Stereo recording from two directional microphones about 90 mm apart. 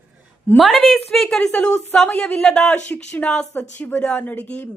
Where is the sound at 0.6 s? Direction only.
Centre (ahead or behind); by 4.7 s 20° left (ahead or behind).